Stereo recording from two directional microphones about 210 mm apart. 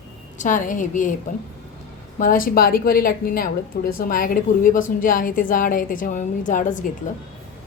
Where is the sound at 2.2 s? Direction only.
40° left (ahead or behind).